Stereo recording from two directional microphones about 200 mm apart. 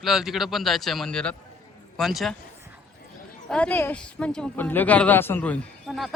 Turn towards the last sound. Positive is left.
turn(degrees=0)  # may be behind; listen again after turning